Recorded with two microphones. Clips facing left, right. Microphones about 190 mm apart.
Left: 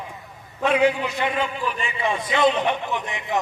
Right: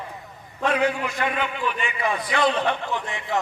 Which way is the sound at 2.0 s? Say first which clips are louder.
Left 3 dB; 25° left (ahead or behind).